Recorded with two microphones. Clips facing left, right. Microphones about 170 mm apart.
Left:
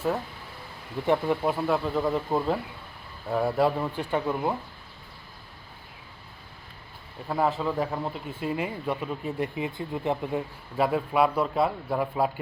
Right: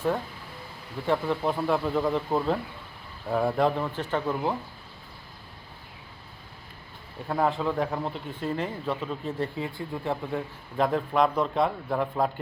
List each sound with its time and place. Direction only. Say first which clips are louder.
1.0 s speech: left 2 dB; 15° left (ahead or behind)
1.4 s speech: even; 5° left (ahead or behind)
7.3 s speech: even; centre (ahead or behind); by 10.4 s 20° left (ahead or behind)
10.8 s speech: even; 5° left (ahead or behind)